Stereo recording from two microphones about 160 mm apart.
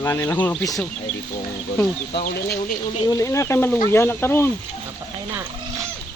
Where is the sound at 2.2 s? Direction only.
70° left (ahead or behind).